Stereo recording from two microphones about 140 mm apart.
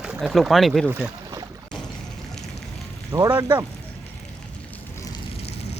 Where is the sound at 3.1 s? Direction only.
25° right (ahead or behind).